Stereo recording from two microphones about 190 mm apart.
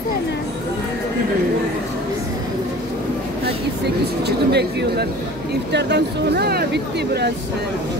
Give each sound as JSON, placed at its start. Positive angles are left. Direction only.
{"t": 4.5, "sound": "speech", "side_deg": -60}